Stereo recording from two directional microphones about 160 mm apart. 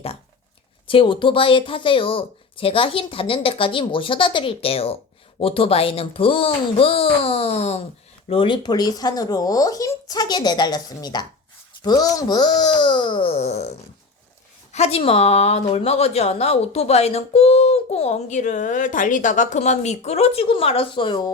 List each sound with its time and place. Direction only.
0.9 s a woman's voice: 35° left (ahead or behind)